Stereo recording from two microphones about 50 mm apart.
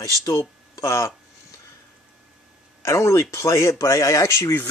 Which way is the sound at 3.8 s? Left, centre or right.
Left.